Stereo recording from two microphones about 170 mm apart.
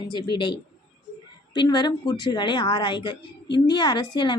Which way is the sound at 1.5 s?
25° left (ahead or behind).